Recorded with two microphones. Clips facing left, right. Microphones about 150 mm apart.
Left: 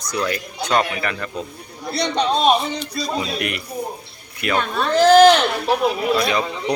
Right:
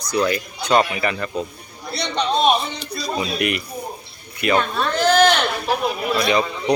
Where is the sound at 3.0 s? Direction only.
5° right (ahead or behind).